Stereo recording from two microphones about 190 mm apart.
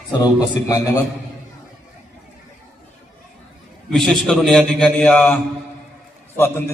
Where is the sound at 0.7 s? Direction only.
15° left (ahead or behind).